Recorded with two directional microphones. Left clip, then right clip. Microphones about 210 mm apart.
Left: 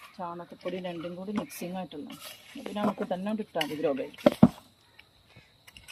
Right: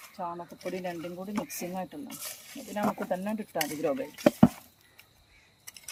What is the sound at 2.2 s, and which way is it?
Stir, centre (ahead or behind).